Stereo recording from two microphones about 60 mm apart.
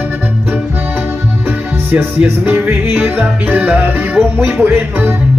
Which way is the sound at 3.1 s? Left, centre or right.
Right.